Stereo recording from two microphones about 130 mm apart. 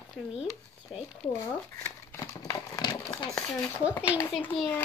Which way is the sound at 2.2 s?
25° left (ahead or behind).